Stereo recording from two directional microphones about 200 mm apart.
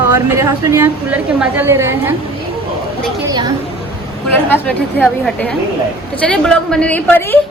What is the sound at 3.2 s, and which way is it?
Speech, 20° right (ahead or behind).